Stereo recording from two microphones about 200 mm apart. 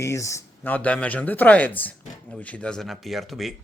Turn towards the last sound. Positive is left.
turn(degrees=0)  # may be behind; listen again after turning